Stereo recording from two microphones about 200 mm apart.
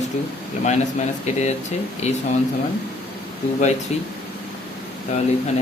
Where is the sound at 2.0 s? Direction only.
35° left (ahead or behind).